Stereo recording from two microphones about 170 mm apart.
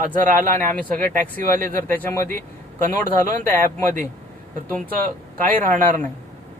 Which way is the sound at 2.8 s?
50° right (ahead or behind).